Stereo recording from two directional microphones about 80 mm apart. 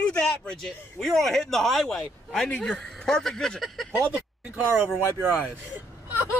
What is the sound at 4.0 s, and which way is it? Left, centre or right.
Speech, right.